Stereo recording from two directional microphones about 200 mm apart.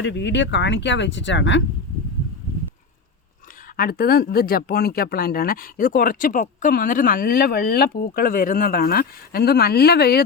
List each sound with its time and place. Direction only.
0.0 s speech: 65° left (ahead or behind)
3.8 s speech: 50° left (ahead or behind)